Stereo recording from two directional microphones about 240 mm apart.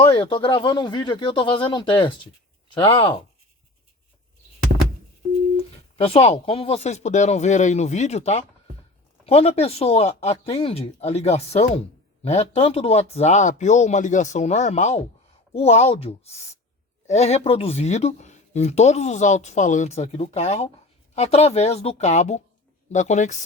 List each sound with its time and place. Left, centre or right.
0.0 s speech: left
6.0 s speech: left